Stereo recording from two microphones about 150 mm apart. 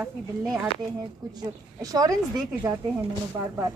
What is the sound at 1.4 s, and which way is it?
A woman's voice, 25° right (ahead or behind).